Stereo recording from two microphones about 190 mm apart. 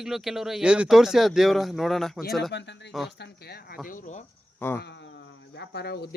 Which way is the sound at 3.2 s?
55° left (ahead or behind).